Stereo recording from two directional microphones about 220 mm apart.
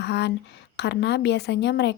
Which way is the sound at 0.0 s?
50° left (ahead or behind).